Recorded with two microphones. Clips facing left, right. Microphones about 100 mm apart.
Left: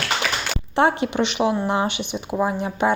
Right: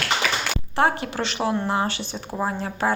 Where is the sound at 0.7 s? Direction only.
25° left (ahead or behind).